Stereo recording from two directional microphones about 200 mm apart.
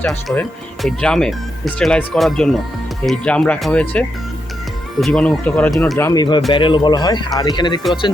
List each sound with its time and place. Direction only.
0.0 s speech: centre (ahead or behind)
6.0 s speech: 15° left (ahead or behind)